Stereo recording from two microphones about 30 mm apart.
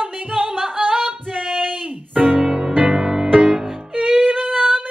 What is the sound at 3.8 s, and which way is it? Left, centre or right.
Music, right.